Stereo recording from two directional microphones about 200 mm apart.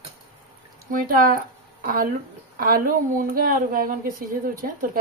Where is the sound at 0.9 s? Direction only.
45° right (ahead or behind).